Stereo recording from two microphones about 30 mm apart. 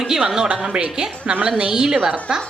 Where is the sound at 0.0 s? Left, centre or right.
Centre.